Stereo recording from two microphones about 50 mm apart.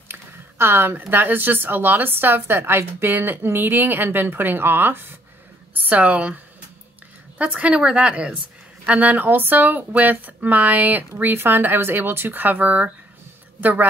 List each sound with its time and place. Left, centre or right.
0.1 s a sound: right
0.9 s a woman's voice: right
5.8 s a woman's voice: right